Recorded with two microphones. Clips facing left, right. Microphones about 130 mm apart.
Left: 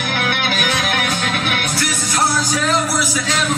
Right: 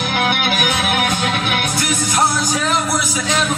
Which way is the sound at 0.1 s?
20° right (ahead or behind).